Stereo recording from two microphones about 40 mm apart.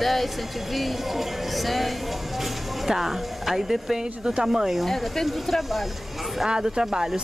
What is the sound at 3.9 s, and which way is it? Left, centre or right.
Speech, centre.